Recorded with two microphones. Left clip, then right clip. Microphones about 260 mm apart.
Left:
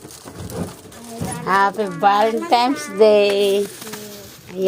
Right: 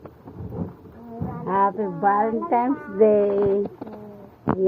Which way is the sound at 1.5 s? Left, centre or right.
Centre.